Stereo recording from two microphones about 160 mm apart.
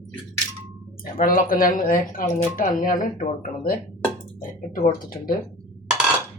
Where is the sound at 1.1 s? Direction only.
60° left (ahead or behind).